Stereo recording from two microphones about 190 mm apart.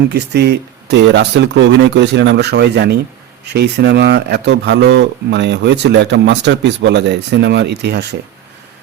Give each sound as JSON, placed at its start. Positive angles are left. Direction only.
{"t": 0.1, "sound": "speech", "side_deg": -60}